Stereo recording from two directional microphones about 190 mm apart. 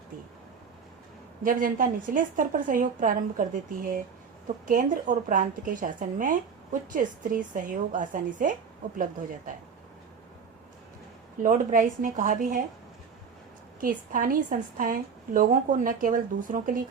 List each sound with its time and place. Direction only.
1.5 s a woman's voice: 45° right (ahead or behind)
11.4 s a woman's voice: 45° right (ahead or behind)
13.8 s a woman's voice: 45° right (ahead or behind)